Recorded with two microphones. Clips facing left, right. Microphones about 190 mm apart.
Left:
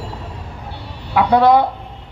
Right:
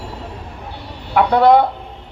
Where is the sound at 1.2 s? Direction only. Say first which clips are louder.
Right 1 dB; 55° right (ahead or behind).